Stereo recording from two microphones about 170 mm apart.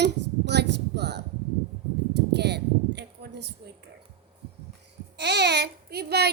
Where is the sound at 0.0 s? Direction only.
80° right.